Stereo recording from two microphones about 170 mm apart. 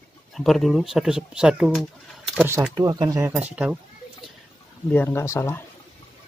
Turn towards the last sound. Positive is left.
turn(degrees=15)  # may be behind; listen again after turning